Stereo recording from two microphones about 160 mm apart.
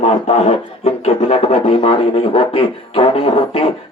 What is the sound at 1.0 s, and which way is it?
Speech, 40° left (ahead or behind).